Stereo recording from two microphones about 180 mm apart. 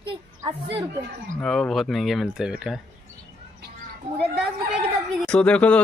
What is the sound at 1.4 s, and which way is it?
Speech, 5° left (ahead or behind).